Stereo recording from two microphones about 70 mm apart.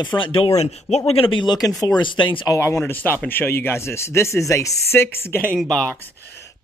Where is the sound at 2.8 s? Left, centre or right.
Left.